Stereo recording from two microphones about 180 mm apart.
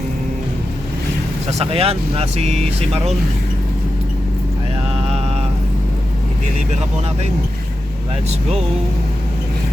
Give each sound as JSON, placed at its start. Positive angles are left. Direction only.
{"t": 1.5, "sound": "speech", "side_deg": -35}